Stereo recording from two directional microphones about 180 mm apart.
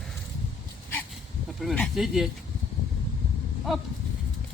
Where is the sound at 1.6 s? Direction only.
Centre (ahead or behind).